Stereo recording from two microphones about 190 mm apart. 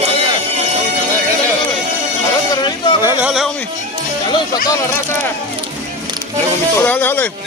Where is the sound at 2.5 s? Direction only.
25° left (ahead or behind).